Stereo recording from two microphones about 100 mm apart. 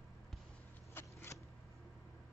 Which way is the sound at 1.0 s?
20° left (ahead or behind).